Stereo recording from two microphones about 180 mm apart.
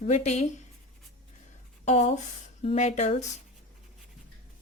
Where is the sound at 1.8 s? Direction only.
40° left (ahead or behind).